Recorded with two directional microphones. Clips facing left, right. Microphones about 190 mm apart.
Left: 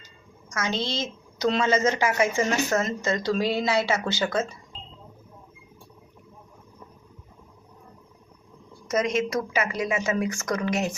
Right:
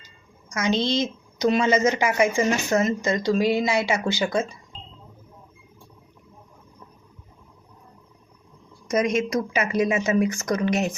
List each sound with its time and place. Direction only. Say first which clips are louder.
0.5 s a woman's voice: right 6 dB; 15° right (ahead or behind)
8.9 s speech: right 2 dB; 15° right (ahead or behind)